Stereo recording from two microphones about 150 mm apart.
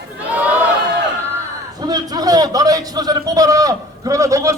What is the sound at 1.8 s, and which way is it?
A man's voice, 25° right (ahead or behind).